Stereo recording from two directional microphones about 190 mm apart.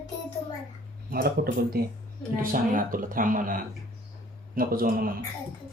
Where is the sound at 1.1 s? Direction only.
55° right (ahead or behind).